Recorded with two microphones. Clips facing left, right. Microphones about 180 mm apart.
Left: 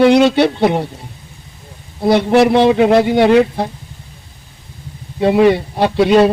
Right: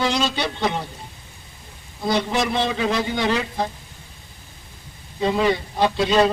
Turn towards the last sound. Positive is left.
turn(degrees=60)  # may be behind; listen again after turning